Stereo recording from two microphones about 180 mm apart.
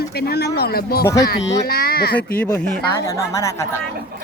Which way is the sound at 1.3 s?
60° left (ahead or behind).